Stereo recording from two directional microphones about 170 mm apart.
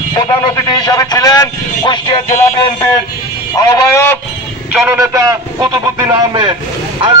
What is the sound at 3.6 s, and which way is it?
Speech, 20° left (ahead or behind).